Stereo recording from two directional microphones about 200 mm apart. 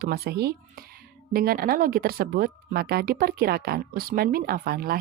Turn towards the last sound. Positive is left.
turn(degrees=-45)  # may be behind; listen again after turning